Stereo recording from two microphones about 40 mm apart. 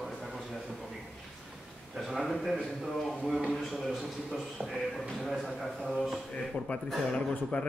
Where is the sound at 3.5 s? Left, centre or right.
Centre.